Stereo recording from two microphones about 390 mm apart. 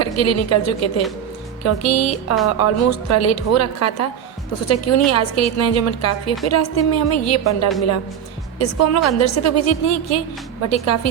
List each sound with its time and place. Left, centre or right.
0.0 s speech: left